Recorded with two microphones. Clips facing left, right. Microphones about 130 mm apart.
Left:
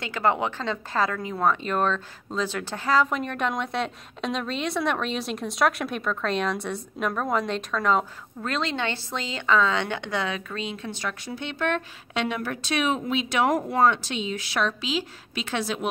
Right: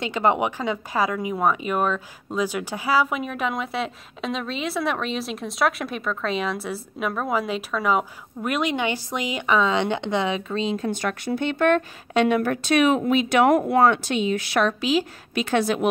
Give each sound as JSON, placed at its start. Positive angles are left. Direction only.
{"t": 0.0, "sound": "speech", "side_deg": -20}
{"t": 10.9, "sound": "a woman's voice", "side_deg": -55}